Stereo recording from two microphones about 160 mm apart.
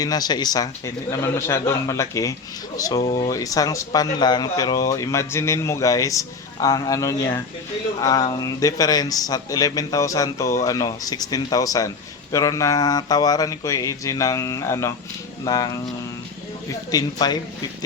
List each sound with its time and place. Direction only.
0.0 s a man's voice: 25° left (ahead or behind)
16.9 s speech: 25° left (ahead or behind)